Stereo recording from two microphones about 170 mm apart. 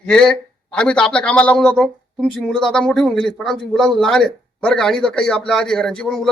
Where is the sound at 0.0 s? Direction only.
5° left (ahead or behind).